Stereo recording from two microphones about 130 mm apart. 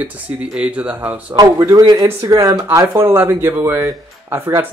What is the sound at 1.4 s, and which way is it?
Speech, 25° right (ahead or behind).